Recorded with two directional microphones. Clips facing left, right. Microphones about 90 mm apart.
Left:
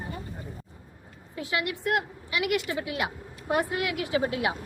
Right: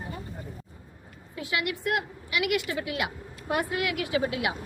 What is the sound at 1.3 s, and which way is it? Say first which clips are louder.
A woman's voice: even; 35° left (ahead or behind).